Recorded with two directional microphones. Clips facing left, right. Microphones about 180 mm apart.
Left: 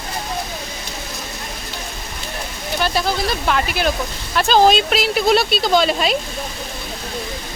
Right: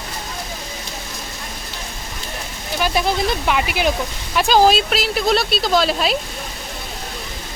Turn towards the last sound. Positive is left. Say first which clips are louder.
# left 1 dB
turn(degrees=0)  # may be behind; listen again after turning